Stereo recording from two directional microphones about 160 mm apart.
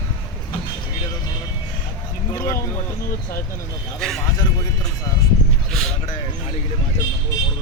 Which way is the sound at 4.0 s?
Centre (ahead or behind).